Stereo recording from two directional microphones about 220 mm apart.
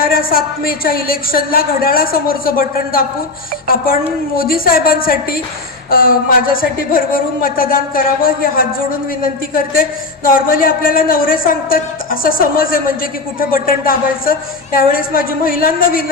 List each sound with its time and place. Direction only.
0.0 s a woman's voice: 40° left (ahead or behind)
4.4 s a woman's voice: 40° left (ahead or behind)
10.2 s a woman's voice: 40° left (ahead or behind)